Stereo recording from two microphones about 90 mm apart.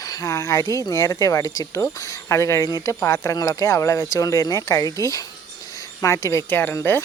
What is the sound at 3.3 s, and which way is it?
Speech, 40° left (ahead or behind).